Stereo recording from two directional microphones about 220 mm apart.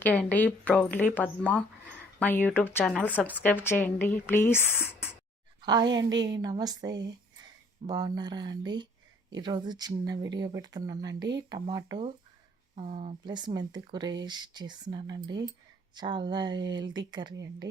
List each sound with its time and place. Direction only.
0.0 s speech: 5° left (ahead or behind)
5.6 s speech: 20° right (ahead or behind)